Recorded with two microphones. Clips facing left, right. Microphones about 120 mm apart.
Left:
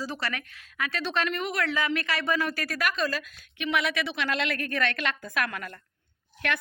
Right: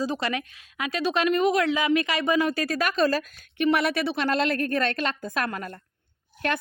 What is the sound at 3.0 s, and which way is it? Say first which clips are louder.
A woman's voice: right 7 dB; 35° right (ahead or behind).